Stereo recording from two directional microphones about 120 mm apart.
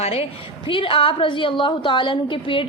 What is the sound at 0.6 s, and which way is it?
A woman's voice, 45° left (ahead or behind).